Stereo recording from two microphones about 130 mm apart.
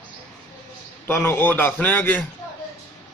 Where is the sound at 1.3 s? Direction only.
15° left (ahead or behind).